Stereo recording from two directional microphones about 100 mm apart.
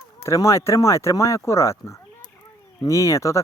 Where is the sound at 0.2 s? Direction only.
30° left (ahead or behind).